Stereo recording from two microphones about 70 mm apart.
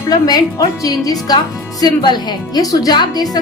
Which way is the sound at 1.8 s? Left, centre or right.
Left.